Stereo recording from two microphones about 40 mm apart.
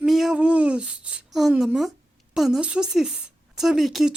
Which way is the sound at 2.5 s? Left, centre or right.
Right.